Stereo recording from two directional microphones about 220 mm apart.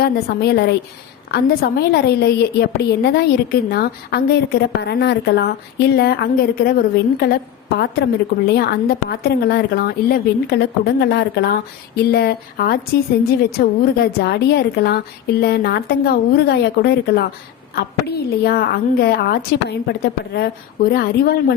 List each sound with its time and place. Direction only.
0.0 s a woman's voice: 50° left (ahead or behind)